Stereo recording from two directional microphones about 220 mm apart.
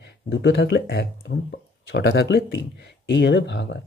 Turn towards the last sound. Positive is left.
turn(degrees=55)  # may be behind; listen again after turning